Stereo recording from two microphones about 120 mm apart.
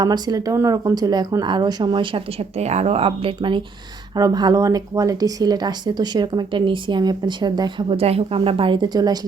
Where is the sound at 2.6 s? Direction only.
65° right (ahead or behind); by 3.6 s 45° right (ahead or behind).